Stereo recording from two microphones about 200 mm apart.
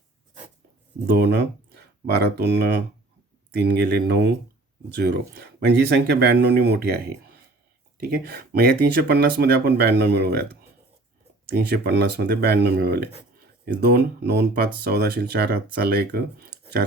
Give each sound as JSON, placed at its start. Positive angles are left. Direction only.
{"t": 1.0, "sound": "speech", "side_deg": -55}